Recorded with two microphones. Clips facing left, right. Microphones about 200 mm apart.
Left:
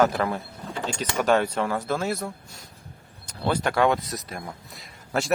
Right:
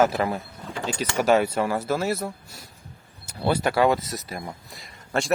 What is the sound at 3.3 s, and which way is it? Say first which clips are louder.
A man's voice: right 2 dB; 10° right (ahead or behind).